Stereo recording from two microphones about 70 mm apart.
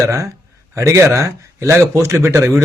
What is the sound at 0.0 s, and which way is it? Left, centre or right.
A man's voice, right.